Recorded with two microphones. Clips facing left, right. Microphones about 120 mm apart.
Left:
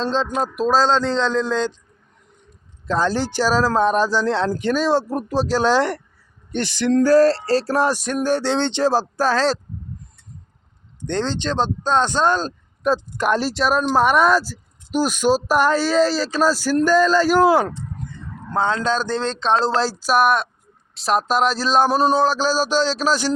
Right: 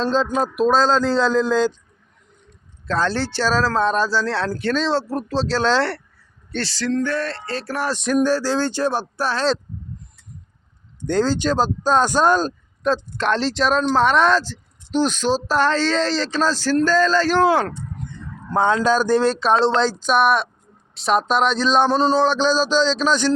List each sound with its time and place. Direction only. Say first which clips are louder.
0.0 s speech: right 2 dB; centre (ahead or behind)
2.8 s speech: left 1 dB; 15° left (ahead or behind)
6.9 s music: left 10 dB; 35° left (ahead or behind)
7.9 s speech: right 5 dB; 5° left (ahead or behind)
8.3 s speech: even; 25° left (ahead or behind)
8.8 s speech: left 3 dB; 90° left
11.0 s speech: right 4 dB; 5° right (ahead or behind)
12.8 s speech: left 1 dB; 10° left (ahead or behind)
18.5 s speech: right 3 dB; 15° right (ahead or behind); by 23.3 s 10° left (ahead or behind)